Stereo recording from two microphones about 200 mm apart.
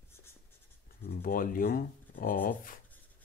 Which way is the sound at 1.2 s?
45° left (ahead or behind).